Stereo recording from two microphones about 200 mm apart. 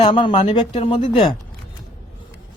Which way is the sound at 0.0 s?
25° left (ahead or behind).